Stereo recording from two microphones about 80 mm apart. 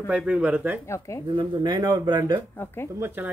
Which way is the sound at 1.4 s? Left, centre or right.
Right.